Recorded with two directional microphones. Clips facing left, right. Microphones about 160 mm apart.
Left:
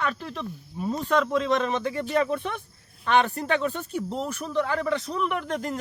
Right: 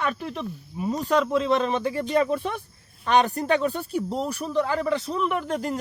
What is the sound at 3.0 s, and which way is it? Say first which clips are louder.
A man's voice: right 2 dB; 40° right (ahead or behind).